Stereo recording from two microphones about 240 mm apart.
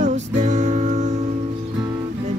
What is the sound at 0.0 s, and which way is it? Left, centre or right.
Music, right.